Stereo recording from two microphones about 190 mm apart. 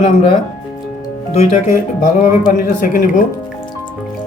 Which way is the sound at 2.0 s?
45° left (ahead or behind).